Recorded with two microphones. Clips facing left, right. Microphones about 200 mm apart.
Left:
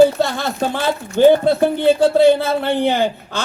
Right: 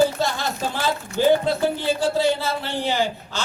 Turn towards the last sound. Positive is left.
turn(degrees=55)  # may be behind; listen again after turning